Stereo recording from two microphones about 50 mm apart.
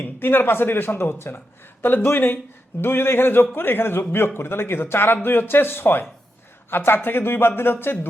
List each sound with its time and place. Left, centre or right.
0.0 s speech: left